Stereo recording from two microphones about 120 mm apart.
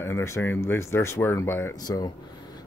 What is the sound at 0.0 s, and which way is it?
Speech, 20° left (ahead or behind).